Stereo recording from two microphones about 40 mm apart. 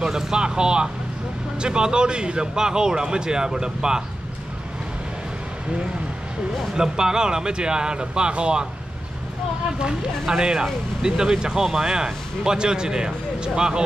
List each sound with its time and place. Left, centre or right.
0.0 s speech: centre
6.7 s speech: centre
9.8 s speech: centre